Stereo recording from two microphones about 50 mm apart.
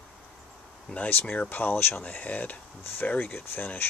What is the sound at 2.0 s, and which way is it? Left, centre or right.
Speech, left.